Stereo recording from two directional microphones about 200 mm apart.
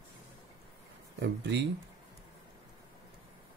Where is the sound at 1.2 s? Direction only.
60° right (ahead or behind).